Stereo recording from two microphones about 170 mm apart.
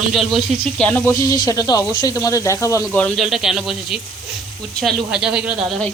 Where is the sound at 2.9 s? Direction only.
5° left (ahead or behind).